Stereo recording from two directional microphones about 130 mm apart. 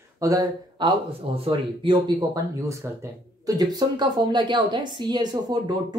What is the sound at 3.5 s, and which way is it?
A woman's voice, 30° right (ahead or behind).